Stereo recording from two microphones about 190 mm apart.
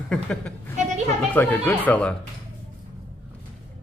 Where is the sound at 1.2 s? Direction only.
10° left (ahead or behind).